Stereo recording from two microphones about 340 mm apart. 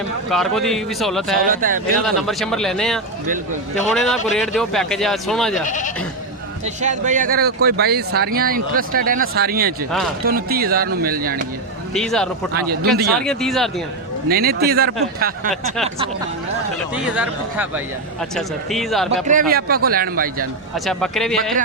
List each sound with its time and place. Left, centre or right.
0.3 s speech: centre
1.4 s speech: right
2.0 s speech: centre
5.6 s speech: left
6.8 s speech: right
11.9 s speech: centre
12.5 s speech: right
13.1 s speech: centre
14.3 s speech: right
16.9 s speech: centre
19.3 s speech: right
20.7 s speech: centre